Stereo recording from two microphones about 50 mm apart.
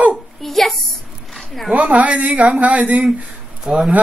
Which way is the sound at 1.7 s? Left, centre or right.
Right.